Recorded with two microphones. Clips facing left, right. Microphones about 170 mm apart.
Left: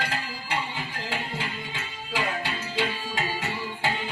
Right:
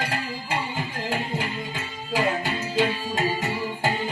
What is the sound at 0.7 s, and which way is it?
Music, 45° right (ahead or behind).